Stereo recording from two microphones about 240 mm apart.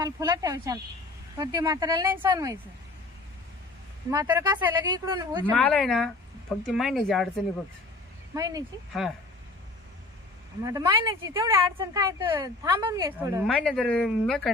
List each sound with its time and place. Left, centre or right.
0.0 s speech: centre
4.1 s speech: centre
5.5 s a woman's voice: centre
8.4 s speech: centre
8.9 s a woman's voice: centre
10.6 s speech: centre
13.4 s a woman's voice: centre